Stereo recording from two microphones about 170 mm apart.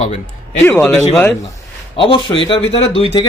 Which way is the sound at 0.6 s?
10° left (ahead or behind).